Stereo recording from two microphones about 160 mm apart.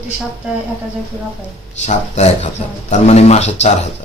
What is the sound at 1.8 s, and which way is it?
Speech, 45° left (ahead or behind).